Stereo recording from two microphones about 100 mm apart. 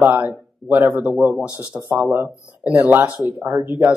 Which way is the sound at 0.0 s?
15° right (ahead or behind).